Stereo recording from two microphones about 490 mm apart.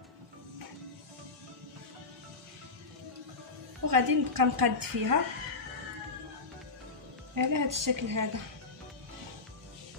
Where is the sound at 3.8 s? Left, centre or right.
Right.